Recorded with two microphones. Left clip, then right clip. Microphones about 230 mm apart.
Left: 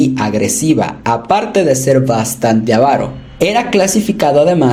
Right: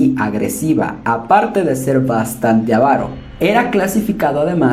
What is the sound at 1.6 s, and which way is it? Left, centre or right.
Speech, left.